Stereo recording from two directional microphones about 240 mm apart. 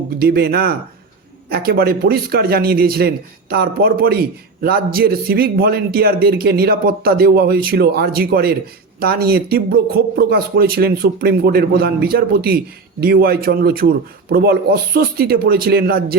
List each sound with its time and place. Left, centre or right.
0.2 s a man's voice: right